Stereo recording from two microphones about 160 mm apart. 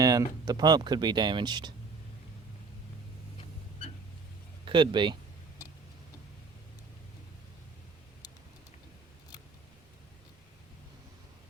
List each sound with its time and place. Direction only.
0.0 s speech: 20° right (ahead or behind)
4.6 s speech: 30° right (ahead or behind)